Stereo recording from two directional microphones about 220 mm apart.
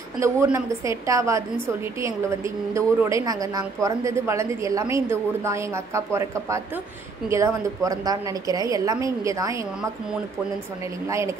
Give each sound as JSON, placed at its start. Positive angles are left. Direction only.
{"t": 0.2, "sound": "a woman's voice", "side_deg": -15}
{"t": 11.1, "sound": "a woman's voice", "side_deg": -15}